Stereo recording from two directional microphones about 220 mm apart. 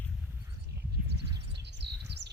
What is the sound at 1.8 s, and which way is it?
Bird vocalization, 50° right (ahead or behind).